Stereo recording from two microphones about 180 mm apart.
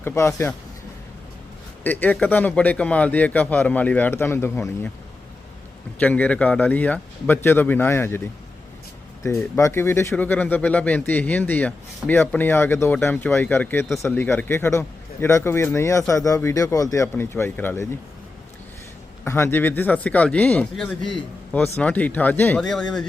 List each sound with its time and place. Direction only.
0.0 s speech: 15° left (ahead or behind)
1.8 s speech: 10° left (ahead or behind)
6.0 s speech: 10° left (ahead or behind)
9.2 s speech: 15° left (ahead or behind)
19.2 s speech: 15° left (ahead or behind)